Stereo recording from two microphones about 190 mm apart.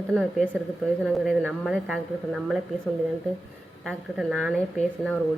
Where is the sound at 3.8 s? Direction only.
Centre (ahead or behind).